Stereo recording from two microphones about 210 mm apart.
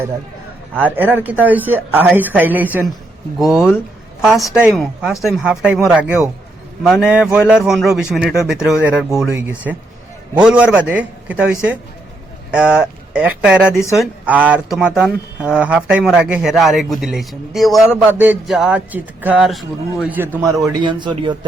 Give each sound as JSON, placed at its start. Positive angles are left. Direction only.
{"t": 0.9, "sound": "a man's voice", "side_deg": -10}
{"t": 12.5, "sound": "a man's voice", "side_deg": -5}
{"t": 20.7, "sound": "a man's voice", "side_deg": -20}